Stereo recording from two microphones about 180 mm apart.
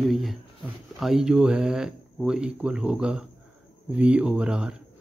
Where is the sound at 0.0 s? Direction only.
Centre (ahead or behind).